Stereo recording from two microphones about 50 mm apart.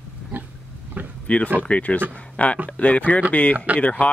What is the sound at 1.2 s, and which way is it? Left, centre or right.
Speech, left.